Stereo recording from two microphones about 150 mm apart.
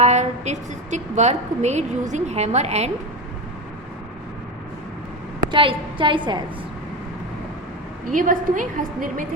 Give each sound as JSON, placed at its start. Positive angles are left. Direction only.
{"t": 0.0, "sound": "a woman's voice", "side_deg": -50}
{"t": 5.5, "sound": "a woman's voice", "side_deg": -35}
{"t": 8.1, "sound": "a woman's voice", "side_deg": -60}